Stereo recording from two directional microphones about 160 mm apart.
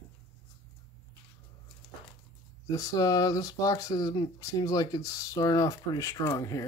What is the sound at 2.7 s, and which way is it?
Speech, 20° left (ahead or behind).